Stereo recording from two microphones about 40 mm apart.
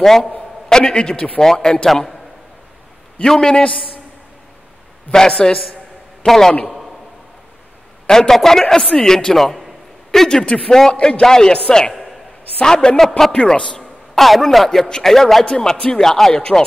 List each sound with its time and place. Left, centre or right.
0.0 s a man's voice: centre; by 1.4 s left
1.4 s speech: centre
3.3 s speech: centre
5.1 s speech: centre
8.1 s speech: centre
9.4 s a man's voice: centre
10.4 s a man's voice: left
10.7 s a man's voice: centre
14.1 s a man's voice: centre